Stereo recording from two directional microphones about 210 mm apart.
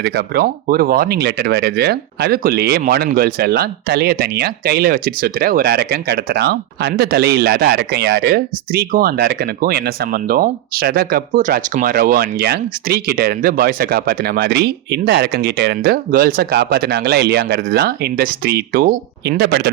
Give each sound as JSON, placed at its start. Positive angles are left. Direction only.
{"t": 0.0, "sound": "speech", "side_deg": -50}